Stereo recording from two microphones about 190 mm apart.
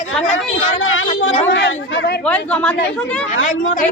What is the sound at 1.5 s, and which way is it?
Speech, 70° left (ahead or behind).